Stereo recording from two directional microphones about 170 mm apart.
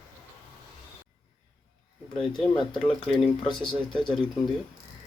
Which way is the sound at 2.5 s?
30° left (ahead or behind).